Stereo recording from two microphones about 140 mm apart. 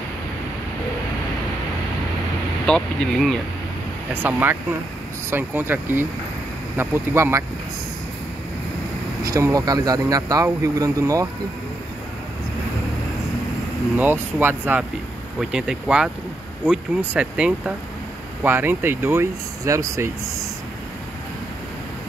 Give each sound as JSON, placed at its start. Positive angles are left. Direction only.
{"t": 2.6, "sound": "speech", "side_deg": 5}
{"t": 4.1, "sound": "speech", "side_deg": -15}
{"t": 9.2, "sound": "speech", "side_deg": -25}
{"t": 13.9, "sound": "speech", "side_deg": -15}